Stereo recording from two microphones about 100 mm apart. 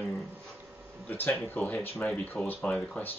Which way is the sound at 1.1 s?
20° left (ahead or behind).